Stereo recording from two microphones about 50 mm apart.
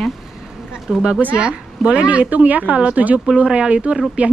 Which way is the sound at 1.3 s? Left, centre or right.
Centre.